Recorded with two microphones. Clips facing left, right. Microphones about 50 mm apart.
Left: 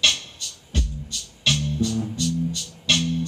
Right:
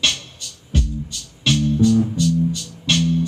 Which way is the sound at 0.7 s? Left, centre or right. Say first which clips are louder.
Right 6 dB; centre.